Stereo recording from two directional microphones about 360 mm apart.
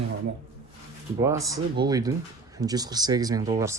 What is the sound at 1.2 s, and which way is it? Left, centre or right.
Speech, centre.